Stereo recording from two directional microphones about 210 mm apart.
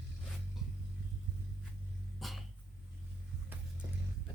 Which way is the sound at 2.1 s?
Centre (ahead or behind).